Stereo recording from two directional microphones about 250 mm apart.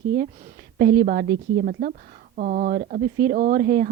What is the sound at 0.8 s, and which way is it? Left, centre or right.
A woman's voice, right.